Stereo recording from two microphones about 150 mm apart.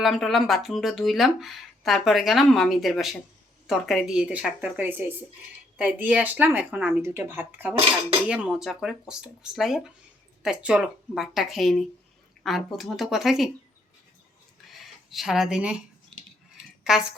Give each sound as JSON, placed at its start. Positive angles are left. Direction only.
{"t": 0.0, "sound": "speech", "side_deg": 0}
{"t": 14.7, "sound": "a sound", "side_deg": 0}
{"t": 16.9, "sound": "speech", "side_deg": -5}